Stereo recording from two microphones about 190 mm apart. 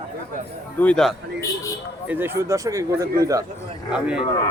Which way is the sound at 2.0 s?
10° right (ahead or behind).